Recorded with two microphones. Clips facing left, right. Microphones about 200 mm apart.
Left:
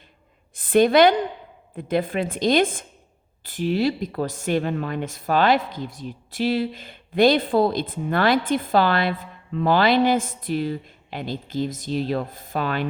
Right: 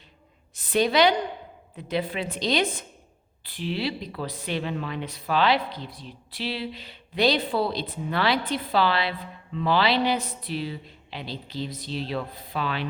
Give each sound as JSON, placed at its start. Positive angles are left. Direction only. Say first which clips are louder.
{"t": 0.5, "sound": "a woman's voice", "louder": "left 6 dB", "side_deg": 50}